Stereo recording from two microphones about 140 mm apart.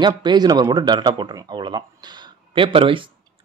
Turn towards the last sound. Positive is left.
turn(degrees=-40)  # may be behind; listen again after turning